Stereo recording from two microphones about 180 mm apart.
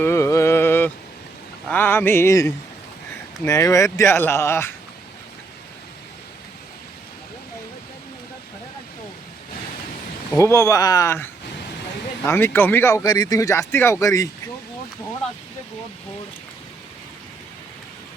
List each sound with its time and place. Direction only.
0.0 s mantra: 15° left (ahead or behind)
1.6 s a sound: 10° left (ahead or behind)
3.4 s speech: 20° left (ahead or behind)
10.3 s speech: 15° left (ahead or behind)